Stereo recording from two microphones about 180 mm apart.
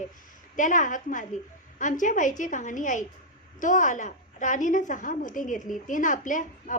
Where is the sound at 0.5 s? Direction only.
45° left (ahead or behind).